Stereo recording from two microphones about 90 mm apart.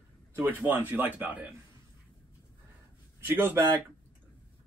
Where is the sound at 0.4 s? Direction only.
20° right (ahead or behind).